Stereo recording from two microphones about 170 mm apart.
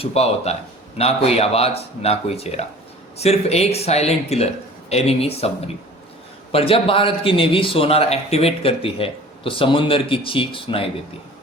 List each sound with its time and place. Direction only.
0.0 s speech: 40° left (ahead or behind)